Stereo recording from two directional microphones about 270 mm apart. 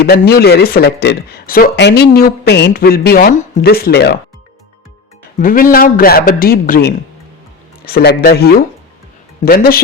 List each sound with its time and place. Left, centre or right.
0.0 s a man's voice: left
5.4 s a man's voice: left